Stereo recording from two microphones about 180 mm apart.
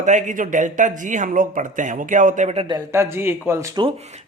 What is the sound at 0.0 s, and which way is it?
A man's voice, 45° right (ahead or behind).